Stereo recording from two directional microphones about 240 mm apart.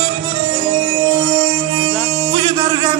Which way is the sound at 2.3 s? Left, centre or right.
Right.